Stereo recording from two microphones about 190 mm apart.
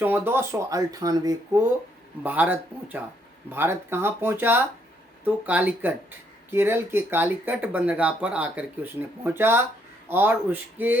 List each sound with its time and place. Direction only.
0.0 s speech: 10° right (ahead or behind)